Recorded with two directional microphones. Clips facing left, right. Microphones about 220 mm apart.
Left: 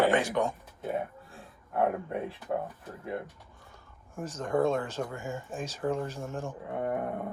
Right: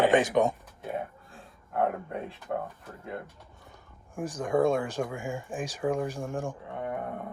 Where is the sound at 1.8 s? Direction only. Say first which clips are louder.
Left 1 dB; 20° left (ahead or behind).